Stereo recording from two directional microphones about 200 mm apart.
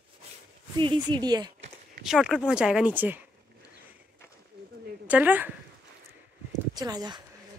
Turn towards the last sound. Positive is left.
turn(degrees=-20)  # may be behind; listen again after turning